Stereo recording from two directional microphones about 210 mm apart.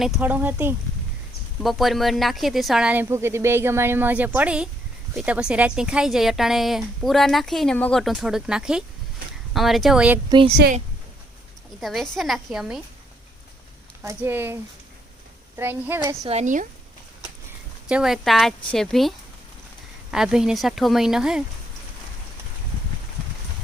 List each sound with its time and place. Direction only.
0.0 s speech: 5° right (ahead or behind)
10.2 s speech: 25° right (ahead or behind)
11.8 s speech: centre (ahead or behind)
14.0 s speech: 10° right (ahead or behind)
16.2 s speech: 30° right (ahead or behind)
17.8 s speech: 5° right (ahead or behind)